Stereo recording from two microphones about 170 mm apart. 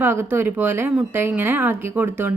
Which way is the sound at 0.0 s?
15° right (ahead or behind).